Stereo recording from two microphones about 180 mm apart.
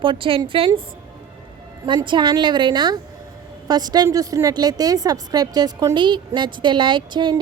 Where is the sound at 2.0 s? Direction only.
25° right (ahead or behind).